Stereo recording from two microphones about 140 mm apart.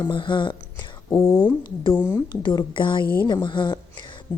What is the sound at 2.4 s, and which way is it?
Speech, 35° left (ahead or behind).